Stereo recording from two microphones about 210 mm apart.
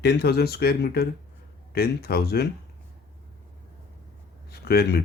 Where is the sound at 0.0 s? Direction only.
50° left (ahead or behind).